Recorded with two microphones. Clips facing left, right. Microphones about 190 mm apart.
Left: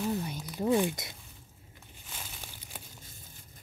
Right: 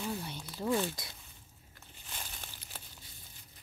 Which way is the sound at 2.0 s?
5° left (ahead or behind).